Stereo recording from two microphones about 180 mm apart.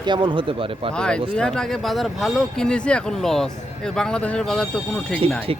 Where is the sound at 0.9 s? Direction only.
5° left (ahead or behind).